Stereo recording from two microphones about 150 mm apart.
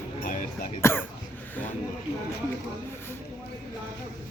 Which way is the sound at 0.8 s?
15° left (ahead or behind).